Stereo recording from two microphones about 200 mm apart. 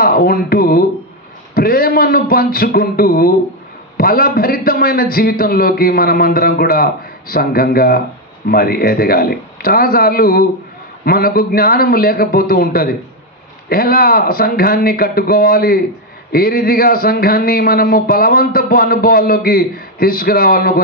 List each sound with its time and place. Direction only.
0.0 s speech: 50° left (ahead or behind)